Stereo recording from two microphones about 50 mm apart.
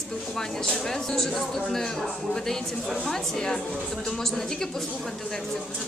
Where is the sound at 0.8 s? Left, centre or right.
Centre.